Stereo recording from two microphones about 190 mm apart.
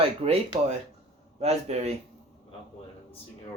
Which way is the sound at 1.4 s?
35° right (ahead or behind).